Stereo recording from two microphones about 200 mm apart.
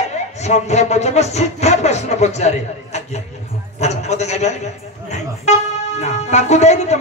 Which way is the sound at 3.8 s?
35° left (ahead or behind).